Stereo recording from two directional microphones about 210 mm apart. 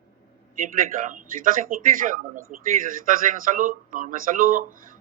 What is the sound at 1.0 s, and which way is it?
Speech, 40° right (ahead or behind).